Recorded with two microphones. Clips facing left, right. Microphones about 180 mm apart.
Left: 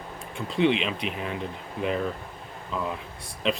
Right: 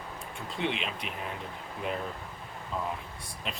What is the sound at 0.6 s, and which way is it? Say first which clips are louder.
Speech: left 10 dB; 90° left.